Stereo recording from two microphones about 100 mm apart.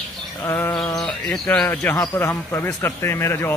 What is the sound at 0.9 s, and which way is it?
Bird, 5° left (ahead or behind).